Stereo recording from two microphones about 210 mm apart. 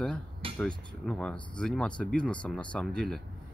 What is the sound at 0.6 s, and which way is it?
Speech, 5° left (ahead or behind).